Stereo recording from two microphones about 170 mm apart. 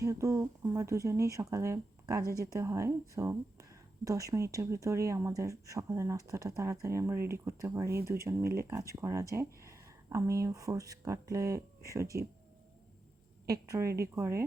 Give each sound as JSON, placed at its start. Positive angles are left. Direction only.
{"t": 0.0, "sound": "speech", "side_deg": -20}
{"t": 13.5, "sound": "speech", "side_deg": -20}